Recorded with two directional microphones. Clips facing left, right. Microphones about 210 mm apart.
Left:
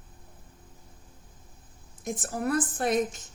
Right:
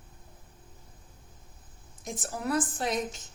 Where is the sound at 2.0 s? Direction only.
55° left (ahead or behind).